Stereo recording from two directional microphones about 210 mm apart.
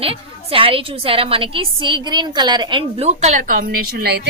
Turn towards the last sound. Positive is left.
turn(degrees=-50)  # may be behind; listen again after turning